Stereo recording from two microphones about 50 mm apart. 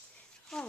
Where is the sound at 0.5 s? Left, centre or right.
Centre.